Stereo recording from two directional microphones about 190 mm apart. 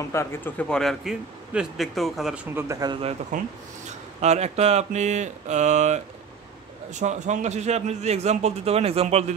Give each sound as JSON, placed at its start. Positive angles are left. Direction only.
{"t": 0.1, "sound": "a man's voice", "side_deg": 15}